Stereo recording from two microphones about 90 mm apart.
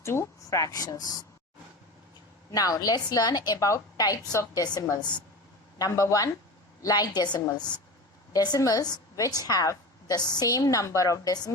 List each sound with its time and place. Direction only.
0.0 s speech: 30° left (ahead or behind)
2.5 s a woman's voice: 45° left (ahead or behind)
5.8 s a woman's voice: 40° left (ahead or behind)